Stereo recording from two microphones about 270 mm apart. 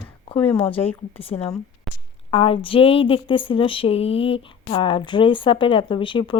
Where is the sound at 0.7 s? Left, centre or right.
Centre.